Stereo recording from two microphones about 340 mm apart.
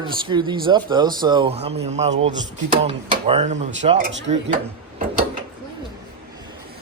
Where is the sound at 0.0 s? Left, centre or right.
Centre; by 4.3 s right.